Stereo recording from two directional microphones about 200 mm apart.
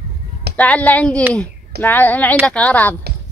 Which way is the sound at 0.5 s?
5° left (ahead or behind).